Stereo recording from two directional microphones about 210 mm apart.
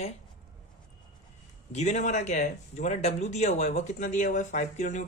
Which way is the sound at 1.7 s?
35° left (ahead or behind).